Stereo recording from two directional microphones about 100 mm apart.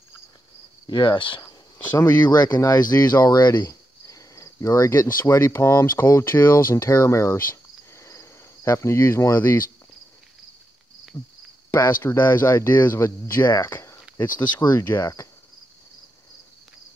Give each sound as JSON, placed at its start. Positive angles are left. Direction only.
{"t": 0.8, "sound": "speech", "side_deg": 50}
{"t": 2.0, "sound": "speech", "side_deg": 45}
{"t": 3.5, "sound": "speech", "side_deg": 30}
{"t": 7.9, "sound": "cricket", "side_deg": 30}
{"t": 11.7, "sound": "speech", "side_deg": 25}